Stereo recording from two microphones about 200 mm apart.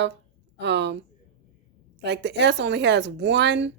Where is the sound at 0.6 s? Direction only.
60° right (ahead or behind).